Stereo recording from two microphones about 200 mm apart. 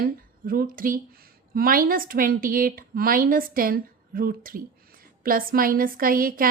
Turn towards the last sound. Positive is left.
turn(degrees=-45)  # may be behind; listen again after turning